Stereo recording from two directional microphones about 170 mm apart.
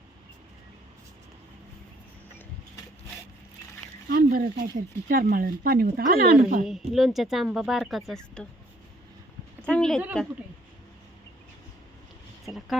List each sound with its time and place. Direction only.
4.1 s speech: 60° right (ahead or behind)
6.7 s speech: centre (ahead or behind)
9.6 s a sound: 5° left (ahead or behind)
12.5 s speech: centre (ahead or behind)